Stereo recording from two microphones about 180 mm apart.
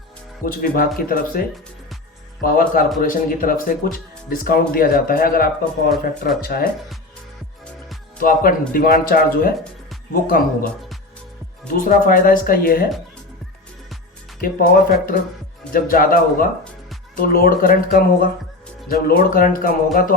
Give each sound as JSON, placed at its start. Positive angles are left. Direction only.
{"t": 0.4, "sound": "speech", "side_deg": 55}
{"t": 8.2, "sound": "speech", "side_deg": 50}
{"t": 11.7, "sound": "speech", "side_deg": 50}
{"t": 14.4, "sound": "speech", "side_deg": 50}